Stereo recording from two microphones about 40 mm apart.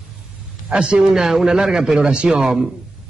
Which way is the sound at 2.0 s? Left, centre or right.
Right.